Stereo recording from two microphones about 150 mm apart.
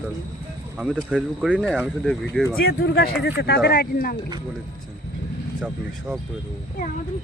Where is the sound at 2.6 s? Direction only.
90° left.